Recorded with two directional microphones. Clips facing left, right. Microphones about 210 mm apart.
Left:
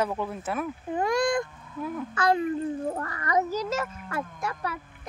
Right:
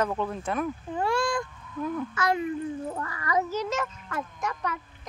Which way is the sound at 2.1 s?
30° left (ahead or behind).